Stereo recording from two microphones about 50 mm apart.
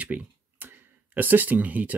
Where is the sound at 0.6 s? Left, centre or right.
Right.